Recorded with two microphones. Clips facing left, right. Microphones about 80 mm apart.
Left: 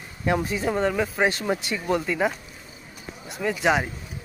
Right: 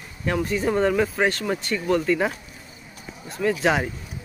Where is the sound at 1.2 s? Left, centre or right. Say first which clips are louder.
Even; centre.